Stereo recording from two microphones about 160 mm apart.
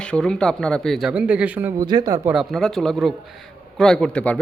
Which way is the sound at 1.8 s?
25° right (ahead or behind).